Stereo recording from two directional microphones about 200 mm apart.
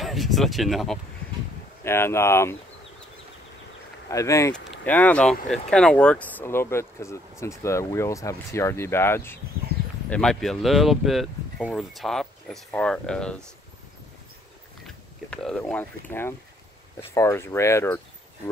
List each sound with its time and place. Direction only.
0.0 s speech: centre (ahead or behind)
1.9 s speech: 10° left (ahead or behind)
4.1 s speech: 15° left (ahead or behind)
15.2 s speech: 5° left (ahead or behind)